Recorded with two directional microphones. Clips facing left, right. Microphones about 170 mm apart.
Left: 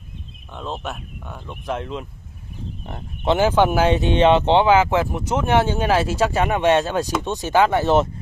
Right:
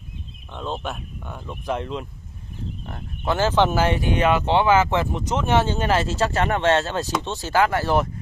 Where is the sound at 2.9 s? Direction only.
20° left (ahead or behind).